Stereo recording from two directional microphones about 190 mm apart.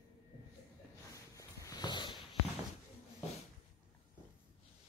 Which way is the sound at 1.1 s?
15° left (ahead or behind).